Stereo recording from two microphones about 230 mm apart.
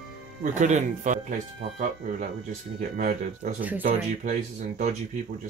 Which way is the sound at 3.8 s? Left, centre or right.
Right.